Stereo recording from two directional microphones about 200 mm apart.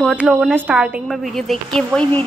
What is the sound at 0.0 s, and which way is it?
A woman's voice, 5° right (ahead or behind).